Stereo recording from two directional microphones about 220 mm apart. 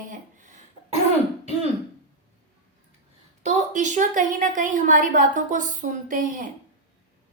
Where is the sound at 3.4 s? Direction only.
35° right (ahead or behind).